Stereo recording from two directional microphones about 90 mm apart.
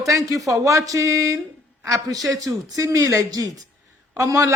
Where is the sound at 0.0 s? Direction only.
40° right (ahead or behind).